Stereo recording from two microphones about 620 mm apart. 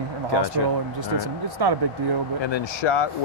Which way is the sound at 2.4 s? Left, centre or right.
Left.